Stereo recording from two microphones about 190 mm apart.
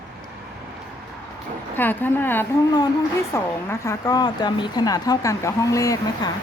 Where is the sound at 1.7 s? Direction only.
10° left (ahead or behind).